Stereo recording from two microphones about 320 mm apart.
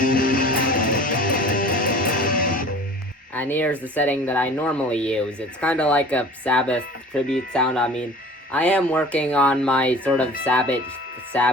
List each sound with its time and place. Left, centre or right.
0.0 s music: left
3.3 s speech: centre